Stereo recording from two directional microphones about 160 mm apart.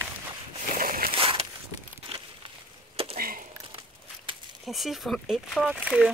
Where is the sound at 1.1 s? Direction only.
35° right (ahead or behind).